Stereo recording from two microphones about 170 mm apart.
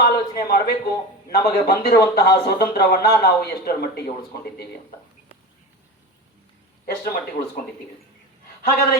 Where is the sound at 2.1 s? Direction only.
70° left (ahead or behind).